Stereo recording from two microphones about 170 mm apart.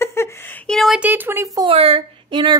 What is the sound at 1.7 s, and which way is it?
Speech, 35° right (ahead or behind).